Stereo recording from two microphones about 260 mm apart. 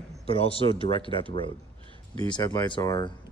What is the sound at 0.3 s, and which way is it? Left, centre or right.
Speech, left.